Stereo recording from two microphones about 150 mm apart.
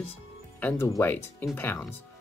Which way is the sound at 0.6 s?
15° left (ahead or behind).